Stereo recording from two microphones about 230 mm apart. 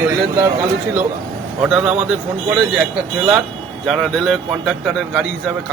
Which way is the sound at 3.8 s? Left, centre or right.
Centre.